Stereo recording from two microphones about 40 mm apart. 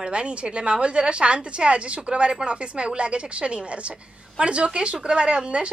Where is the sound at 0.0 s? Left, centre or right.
Right.